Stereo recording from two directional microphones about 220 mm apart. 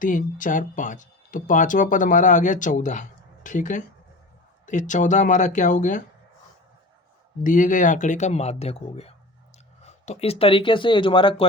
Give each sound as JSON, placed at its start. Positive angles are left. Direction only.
{"t": 0.0, "sound": "speech", "side_deg": 35}
{"t": 7.4, "sound": "speech", "side_deg": 35}